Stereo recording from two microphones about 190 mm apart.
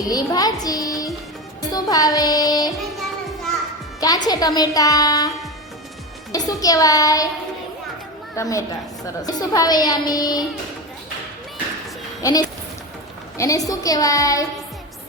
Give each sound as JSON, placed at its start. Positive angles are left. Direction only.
{"t": 0.0, "sound": "a woman's voice", "side_deg": 20}
{"t": 2.7, "sound": "music", "side_deg": 0}
{"t": 4.3, "sound": "a woman's voice", "side_deg": 20}
{"t": 6.3, "sound": "a woman's voice", "side_deg": 20}
{"t": 8.4, "sound": "a woman's voice", "side_deg": 15}
{"t": 12.2, "sound": "a woman's voice", "side_deg": 20}